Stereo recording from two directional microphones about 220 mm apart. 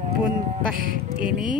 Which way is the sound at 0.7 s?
40° right (ahead or behind).